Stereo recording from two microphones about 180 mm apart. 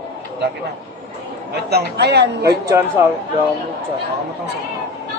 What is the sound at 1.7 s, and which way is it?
Speech, 65° right (ahead or behind).